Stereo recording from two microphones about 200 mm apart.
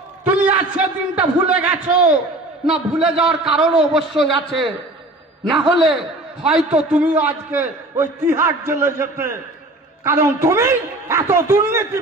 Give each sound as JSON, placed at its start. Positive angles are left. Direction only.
{"t": 0.2, "sound": "a man's voice", "side_deg": -10}